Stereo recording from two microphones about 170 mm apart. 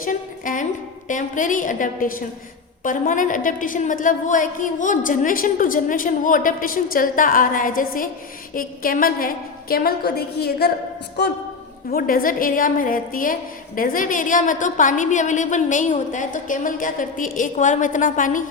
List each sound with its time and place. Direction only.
0.0 s a woman's voice: 50° left (ahead or behind); by 10.7 s 70° left (ahead or behind)
11.2 s speech: 80° left
11.9 s a woman's voice: 60° left (ahead or behind)